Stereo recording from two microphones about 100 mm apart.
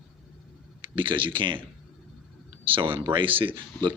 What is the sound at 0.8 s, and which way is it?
Speech, 55° right (ahead or behind).